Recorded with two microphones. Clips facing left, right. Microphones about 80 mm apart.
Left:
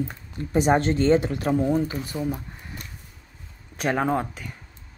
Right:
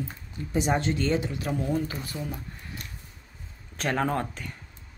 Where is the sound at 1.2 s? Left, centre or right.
Left.